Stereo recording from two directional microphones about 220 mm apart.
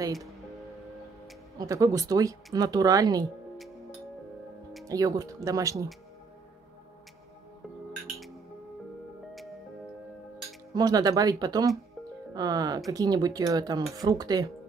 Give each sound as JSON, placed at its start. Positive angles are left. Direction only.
{"t": 0.0, "sound": "speech", "side_deg": -15}
{"t": 1.6, "sound": "speech", "side_deg": -15}
{"t": 4.8, "sound": "speech", "side_deg": -15}
{"t": 10.7, "sound": "speech", "side_deg": -15}